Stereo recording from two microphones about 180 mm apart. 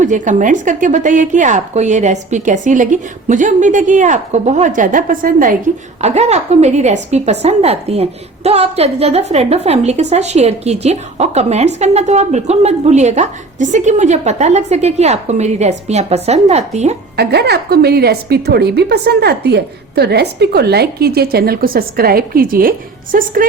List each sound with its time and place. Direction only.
0.0 s a woman's voice: 45° right (ahead or behind)
6.0 s a woman's voice: 35° right (ahead or behind)
17.2 s a woman's voice: 65° right (ahead or behind)